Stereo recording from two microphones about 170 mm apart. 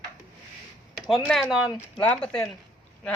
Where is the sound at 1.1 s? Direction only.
Centre (ahead or behind).